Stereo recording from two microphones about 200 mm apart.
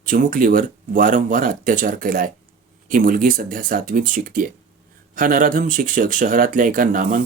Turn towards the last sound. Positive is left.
turn(degrees=-40)  # may be behind; listen again after turning